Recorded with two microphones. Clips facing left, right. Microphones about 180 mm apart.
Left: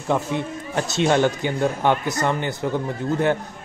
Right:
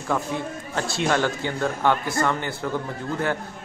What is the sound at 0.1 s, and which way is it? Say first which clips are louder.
A man's voice: left 3 dB; 20° left (ahead or behind).